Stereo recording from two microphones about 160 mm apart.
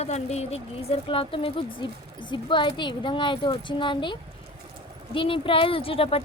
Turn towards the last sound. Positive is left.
turn(degrees=35)  # may be behind; listen again after turning